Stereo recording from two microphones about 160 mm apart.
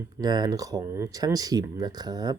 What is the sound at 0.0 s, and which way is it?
Speech, 25° right (ahead or behind).